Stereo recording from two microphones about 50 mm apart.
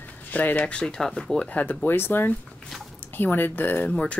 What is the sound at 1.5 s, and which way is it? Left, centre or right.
Speech, left.